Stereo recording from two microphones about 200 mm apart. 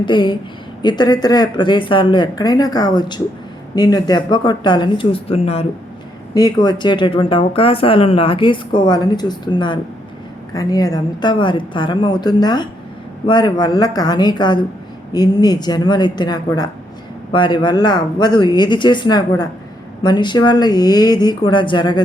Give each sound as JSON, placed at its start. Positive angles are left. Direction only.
{"t": 0.0, "sound": "speech", "side_deg": 25}
{"t": 6.3, "sound": "speech", "side_deg": 20}